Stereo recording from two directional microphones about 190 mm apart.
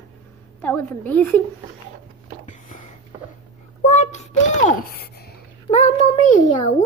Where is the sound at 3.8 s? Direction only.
40° left (ahead or behind); by 5.3 s 55° left (ahead or behind).